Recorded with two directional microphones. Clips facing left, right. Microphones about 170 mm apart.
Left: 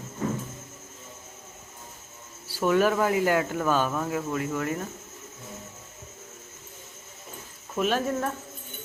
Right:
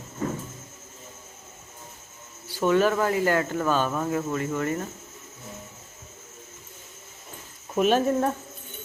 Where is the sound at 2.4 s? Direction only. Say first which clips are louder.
Right 1 dB; 5° left (ahead or behind).